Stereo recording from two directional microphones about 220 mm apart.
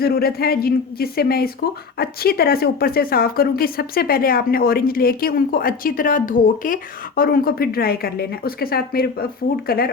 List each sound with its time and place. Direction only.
0.0 s a woman's voice: 45° left (ahead or behind)